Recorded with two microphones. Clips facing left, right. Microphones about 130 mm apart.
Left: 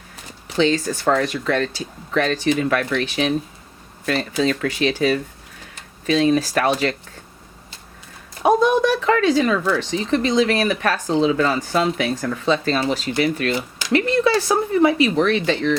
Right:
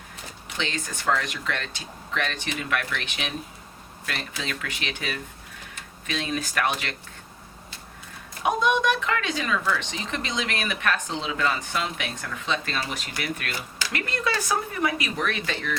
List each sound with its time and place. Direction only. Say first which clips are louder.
0.4 s speech: left 13 dB; 35° left (ahead or behind)
8.4 s speech: left 7 dB; 35° left (ahead or behind)